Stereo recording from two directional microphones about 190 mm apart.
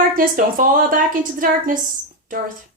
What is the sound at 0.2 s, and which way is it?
A woman's voice, 45° right (ahead or behind).